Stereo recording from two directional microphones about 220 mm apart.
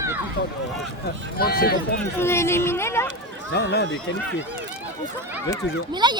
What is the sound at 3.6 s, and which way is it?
Speech, 50° left (ahead or behind).